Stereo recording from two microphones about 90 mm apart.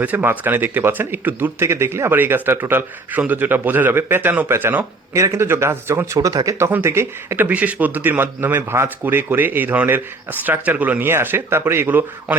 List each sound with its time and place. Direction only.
0.0 s speech: 20° right (ahead or behind)
7.4 s speech: 15° right (ahead or behind)